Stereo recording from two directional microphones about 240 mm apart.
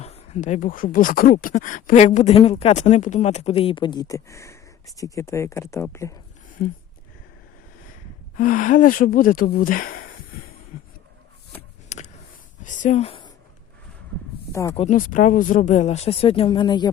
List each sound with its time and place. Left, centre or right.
0.0 s speech: left; by 6.1 s centre
8.4 s speech: left
10.7 s a sound: left
12.6 s speech: left
14.5 s speech: centre
14.8 s speech: left